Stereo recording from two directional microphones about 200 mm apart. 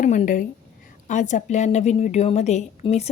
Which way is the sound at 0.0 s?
40° left (ahead or behind).